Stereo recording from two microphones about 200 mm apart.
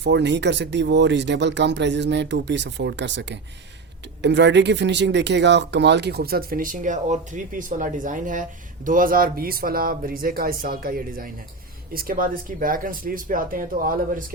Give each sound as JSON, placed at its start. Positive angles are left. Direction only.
{"t": 0.0, "sound": "speech", "side_deg": -60}